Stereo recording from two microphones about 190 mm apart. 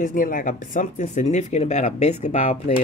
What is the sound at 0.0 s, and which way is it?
Speech, 45° left (ahead or behind).